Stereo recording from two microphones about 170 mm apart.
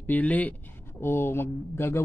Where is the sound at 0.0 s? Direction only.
10° left (ahead or behind).